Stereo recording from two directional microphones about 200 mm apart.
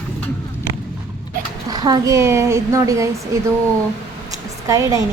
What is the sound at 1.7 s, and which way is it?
A woman's voice, 20° right (ahead or behind).